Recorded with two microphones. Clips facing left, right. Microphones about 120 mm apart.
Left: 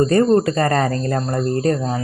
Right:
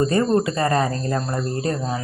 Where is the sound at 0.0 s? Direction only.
45° left (ahead or behind).